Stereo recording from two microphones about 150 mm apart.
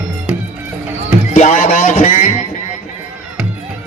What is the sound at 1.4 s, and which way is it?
Music, 55° left (ahead or behind).